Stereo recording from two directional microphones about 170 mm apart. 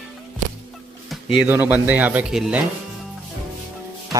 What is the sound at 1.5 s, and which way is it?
Speech, 10° right (ahead or behind).